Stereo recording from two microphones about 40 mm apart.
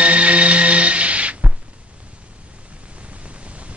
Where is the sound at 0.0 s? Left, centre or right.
Right.